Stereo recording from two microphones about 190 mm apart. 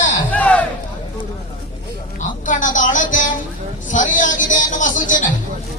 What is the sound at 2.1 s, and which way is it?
Music, 40° left (ahead or behind).